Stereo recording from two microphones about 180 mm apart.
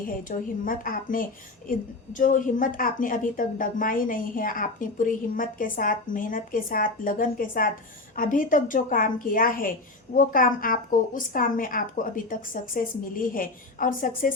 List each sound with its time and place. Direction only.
0.0 s a woman's voice: 50° left (ahead or behind)